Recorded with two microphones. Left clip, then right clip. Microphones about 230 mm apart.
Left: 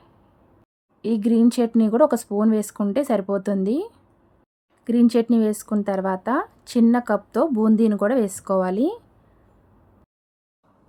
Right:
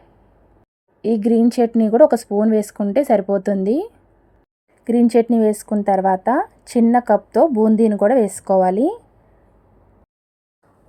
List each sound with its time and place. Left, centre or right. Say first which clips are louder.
1.0 s a woman's voice: right 4 dB; centre
4.8 s a woman's voice: right 4 dB; centre
8.7 s speech: right 5 dB; left